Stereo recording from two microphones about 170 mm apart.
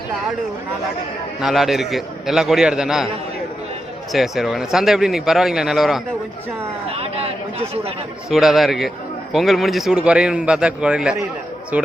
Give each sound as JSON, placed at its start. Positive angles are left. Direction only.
{"t": 1.4, "sound": "a man's voice", "side_deg": 0}
{"t": 4.1, "sound": "a man's voice", "side_deg": 0}
{"t": 6.9, "sound": "speech", "side_deg": -35}
{"t": 8.3, "sound": "a man's voice", "side_deg": 0}